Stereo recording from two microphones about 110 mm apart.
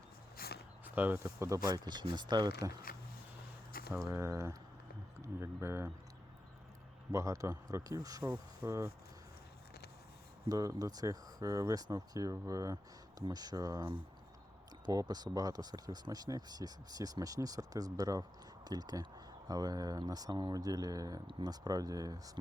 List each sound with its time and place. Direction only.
0.9 s speech: 15° right (ahead or behind); by 2.7 s 35° right (ahead or behind)
3.9 s speech: 25° right (ahead or behind)
7.1 s speech: 25° right (ahead or behind)
8.6 s speech: 25° right (ahead or behind)
10.5 s speech: 30° right (ahead or behind)